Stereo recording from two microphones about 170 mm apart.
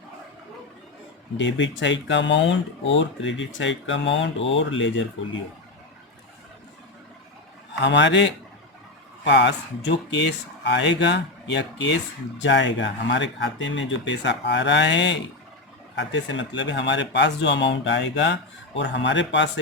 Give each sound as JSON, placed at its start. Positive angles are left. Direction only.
{"t": 1.4, "sound": "speech", "side_deg": 90}
{"t": 7.8, "sound": "speech", "side_deg": 90}